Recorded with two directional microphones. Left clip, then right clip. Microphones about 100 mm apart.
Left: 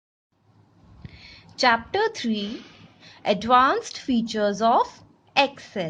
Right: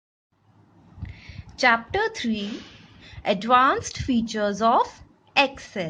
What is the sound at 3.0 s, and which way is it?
A woman's voice, 20° left (ahead or behind).